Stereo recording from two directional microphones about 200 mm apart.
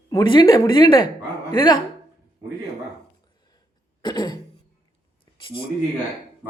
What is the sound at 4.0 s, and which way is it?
Throat clearing, 20° left (ahead or behind).